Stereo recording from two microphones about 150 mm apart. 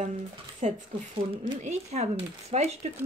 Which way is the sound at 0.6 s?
55° right (ahead or behind).